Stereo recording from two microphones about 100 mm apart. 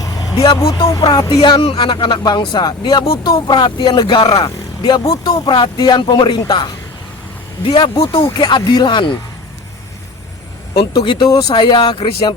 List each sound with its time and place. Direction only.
0.0 s vehicle: 40° left (ahead or behind)
0.9 s speech: 45° left (ahead or behind)
1.6 s speech: 65° left (ahead or behind); by 5.0 s 50° left (ahead or behind)
5.0 s speech: 40° left (ahead or behind); by 8.2 s 65° left (ahead or behind)
8.4 s speech: 45° left (ahead or behind)
10.8 s speech: 55° left (ahead or behind)
11.3 s speech: 40° left (ahead or behind)
11.6 s speech: 50° left (ahead or behind)